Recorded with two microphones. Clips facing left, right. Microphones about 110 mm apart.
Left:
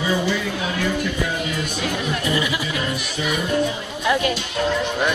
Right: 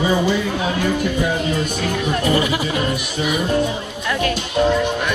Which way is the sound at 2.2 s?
45° right (ahead or behind).